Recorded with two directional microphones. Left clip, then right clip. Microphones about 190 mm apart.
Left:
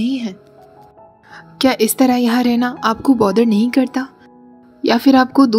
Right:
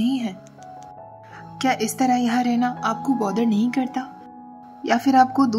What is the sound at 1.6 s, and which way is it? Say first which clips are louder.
A woman's voice: left 7 dB; 15° left (ahead or behind).